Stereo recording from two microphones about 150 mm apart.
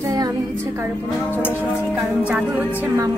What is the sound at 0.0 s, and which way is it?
Music, 20° right (ahead or behind).